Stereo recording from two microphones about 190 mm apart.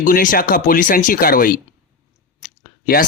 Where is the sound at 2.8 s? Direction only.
50° left (ahead or behind).